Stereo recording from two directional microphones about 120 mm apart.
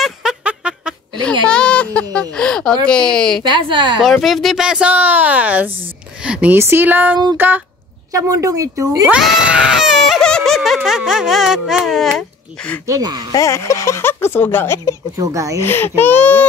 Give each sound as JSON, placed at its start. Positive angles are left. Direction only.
{"t": 0.0, "sound": "music", "side_deg": -5}
{"t": 1.5, "sound": "a sound", "side_deg": 10}
{"t": 2.0, "sound": "speech", "side_deg": 10}
{"t": 3.4, "sound": "a woman's voice", "side_deg": -40}
{"t": 4.0, "sound": "speech", "side_deg": 0}
{"t": 8.1, "sound": "a woman's voice", "side_deg": -25}
{"t": 9.1, "sound": "baby cry", "side_deg": -10}
{"t": 12.8, "sound": "a woman's voice", "side_deg": -30}
{"t": 13.3, "sound": "speech", "side_deg": 25}
{"t": 15.1, "sound": "a woman's voice", "side_deg": -25}
{"t": 15.6, "sound": "speech", "side_deg": 20}